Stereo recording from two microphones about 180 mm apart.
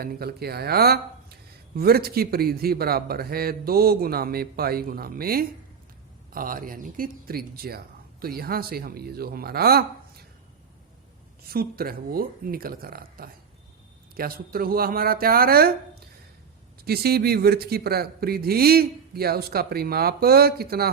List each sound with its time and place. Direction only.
0.0 s speech: 60° right (ahead or behind)
11.4 s speech: 55° right (ahead or behind)